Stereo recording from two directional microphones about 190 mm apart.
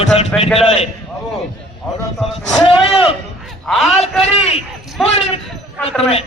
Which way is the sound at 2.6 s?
30° left (ahead or behind).